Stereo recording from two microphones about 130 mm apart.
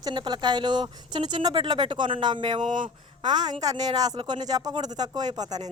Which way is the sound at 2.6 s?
75° right (ahead or behind).